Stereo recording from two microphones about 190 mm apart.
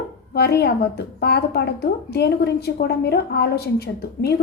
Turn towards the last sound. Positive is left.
turn(degrees=55)  # may be behind; listen again after turning